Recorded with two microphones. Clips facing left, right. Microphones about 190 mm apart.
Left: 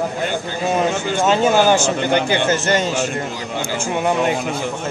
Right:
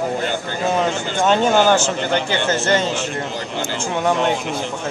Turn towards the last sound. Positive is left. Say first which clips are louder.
# even
turn(degrees=5)  # may be behind; listen again after turning